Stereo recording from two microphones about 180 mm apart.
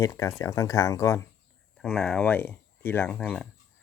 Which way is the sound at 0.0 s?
20° left (ahead or behind).